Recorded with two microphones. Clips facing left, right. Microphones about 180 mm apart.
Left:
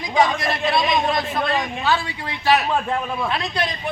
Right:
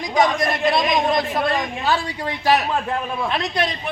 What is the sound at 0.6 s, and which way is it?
Speech, 20° right (ahead or behind).